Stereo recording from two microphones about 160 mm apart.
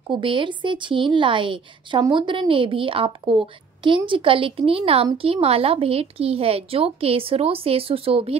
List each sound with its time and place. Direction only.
0.0 s speech: 30° right (ahead or behind)